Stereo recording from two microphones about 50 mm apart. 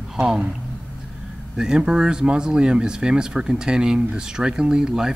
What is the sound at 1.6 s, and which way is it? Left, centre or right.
Speech, centre.